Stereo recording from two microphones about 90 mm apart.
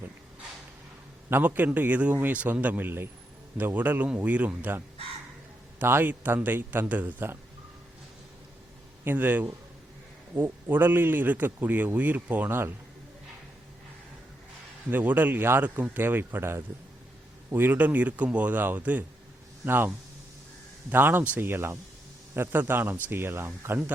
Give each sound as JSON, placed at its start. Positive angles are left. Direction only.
{"t": 1.3, "sound": "speech", "side_deg": -20}
{"t": 5.8, "sound": "speech", "side_deg": -25}
{"t": 9.0, "sound": "speech", "side_deg": -20}
{"t": 14.8, "sound": "a man's voice", "side_deg": -20}
{"t": 20.9, "sound": "speech", "side_deg": -25}